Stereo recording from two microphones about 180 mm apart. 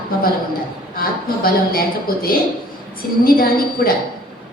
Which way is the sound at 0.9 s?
55° left (ahead or behind).